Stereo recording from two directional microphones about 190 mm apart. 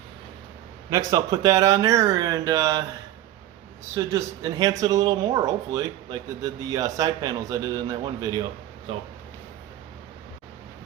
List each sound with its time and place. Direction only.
0.9 s speech: 20° right (ahead or behind)
3.9 s speech: 20° right (ahead or behind)